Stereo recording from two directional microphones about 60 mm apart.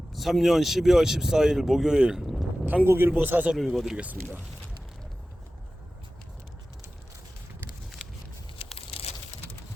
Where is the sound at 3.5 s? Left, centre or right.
Centre.